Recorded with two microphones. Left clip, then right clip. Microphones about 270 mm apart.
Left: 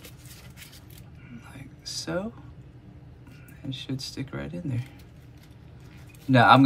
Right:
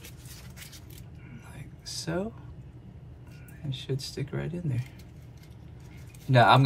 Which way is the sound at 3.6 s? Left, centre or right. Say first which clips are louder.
Left 1 dB; left.